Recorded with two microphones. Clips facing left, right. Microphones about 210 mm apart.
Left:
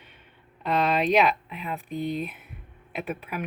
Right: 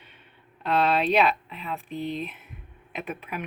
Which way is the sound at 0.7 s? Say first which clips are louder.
Even; 10° left (ahead or behind).